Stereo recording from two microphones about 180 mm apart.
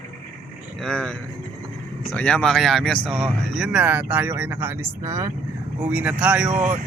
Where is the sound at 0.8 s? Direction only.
5° left (ahead or behind).